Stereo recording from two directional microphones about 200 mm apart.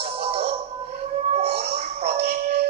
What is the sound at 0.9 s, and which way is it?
Music, 30° right (ahead or behind).